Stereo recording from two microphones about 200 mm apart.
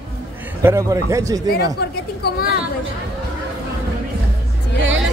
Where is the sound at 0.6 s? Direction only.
15° right (ahead or behind).